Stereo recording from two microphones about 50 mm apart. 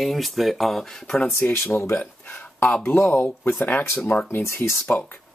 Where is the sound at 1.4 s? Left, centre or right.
Left.